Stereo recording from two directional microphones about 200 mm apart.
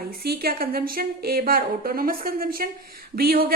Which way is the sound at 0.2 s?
50° right (ahead or behind).